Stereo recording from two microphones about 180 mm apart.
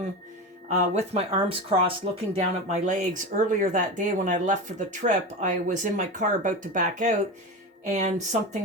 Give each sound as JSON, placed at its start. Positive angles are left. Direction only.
{"t": 0.7, "sound": "speech", "side_deg": -35}